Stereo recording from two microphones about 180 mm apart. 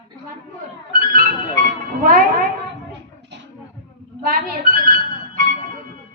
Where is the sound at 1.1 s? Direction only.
55° right (ahead or behind).